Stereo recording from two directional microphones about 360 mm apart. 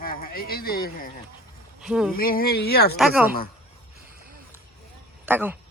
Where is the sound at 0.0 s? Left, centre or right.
Left.